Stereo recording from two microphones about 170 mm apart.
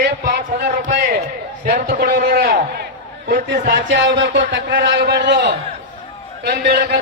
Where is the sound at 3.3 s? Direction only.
50° right (ahead or behind).